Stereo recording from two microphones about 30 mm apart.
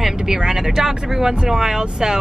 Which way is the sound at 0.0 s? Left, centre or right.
Centre.